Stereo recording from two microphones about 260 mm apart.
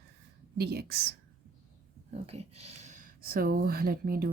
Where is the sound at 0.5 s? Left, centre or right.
Right.